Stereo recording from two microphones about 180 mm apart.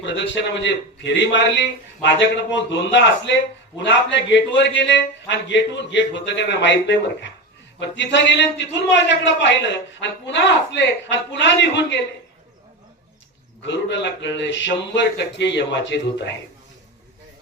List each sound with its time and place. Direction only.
0.6 s a man's voice: 85° left
13.6 s a man's voice: 80° left